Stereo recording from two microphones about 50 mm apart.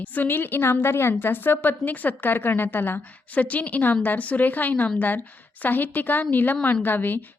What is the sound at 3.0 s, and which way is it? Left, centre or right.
A woman's voice, left.